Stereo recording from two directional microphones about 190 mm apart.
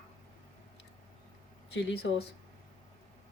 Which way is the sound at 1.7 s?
60° left (ahead or behind).